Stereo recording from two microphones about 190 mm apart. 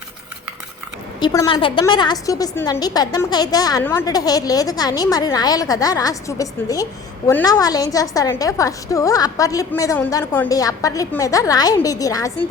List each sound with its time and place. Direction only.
1.2 s a woman's voice: 20° left (ahead or behind)